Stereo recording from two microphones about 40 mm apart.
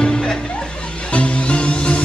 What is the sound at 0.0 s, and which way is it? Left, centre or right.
Music, left.